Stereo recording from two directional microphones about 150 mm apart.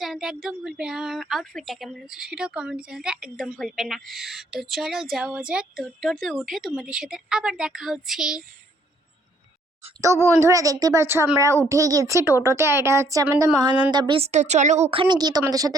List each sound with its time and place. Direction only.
0.0 s a woman's voice: centre (ahead or behind)
10.0 s a woman's voice: 20° right (ahead or behind)
14.2 s a woman's voice: 50° right (ahead or behind); by 15.7 s 25° right (ahead or behind)